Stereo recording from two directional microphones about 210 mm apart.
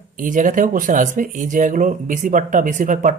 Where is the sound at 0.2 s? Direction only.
40° right (ahead or behind).